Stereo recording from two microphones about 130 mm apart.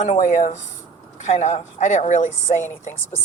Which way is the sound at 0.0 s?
60° left (ahead or behind).